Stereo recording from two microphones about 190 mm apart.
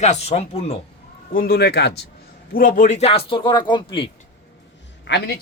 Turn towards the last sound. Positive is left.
turn(degrees=65)  # may be behind; listen again after turning